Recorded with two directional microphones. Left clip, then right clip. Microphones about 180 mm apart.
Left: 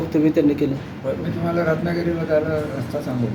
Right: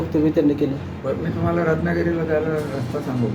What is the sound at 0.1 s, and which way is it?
Speech, 25° left (ahead or behind).